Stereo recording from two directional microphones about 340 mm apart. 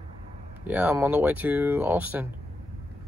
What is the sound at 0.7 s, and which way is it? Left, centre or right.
Speech, centre.